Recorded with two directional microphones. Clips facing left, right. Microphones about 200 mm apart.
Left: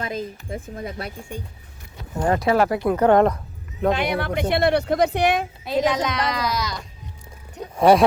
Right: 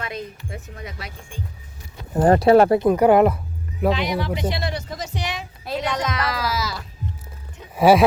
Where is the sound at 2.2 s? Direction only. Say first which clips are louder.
Right 6 dB; 35° right (ahead or behind).